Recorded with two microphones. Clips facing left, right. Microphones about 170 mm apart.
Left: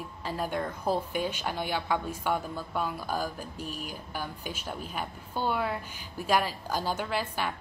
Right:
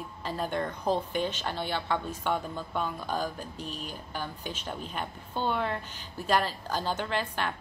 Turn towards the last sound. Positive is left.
turn(degrees=10)  # may be behind; listen again after turning